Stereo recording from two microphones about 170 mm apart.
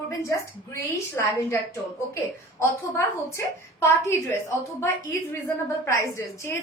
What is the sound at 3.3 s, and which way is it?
A woman's voice, 15° left (ahead or behind).